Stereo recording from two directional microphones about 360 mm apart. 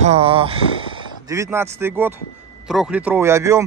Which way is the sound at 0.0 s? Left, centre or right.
Centre.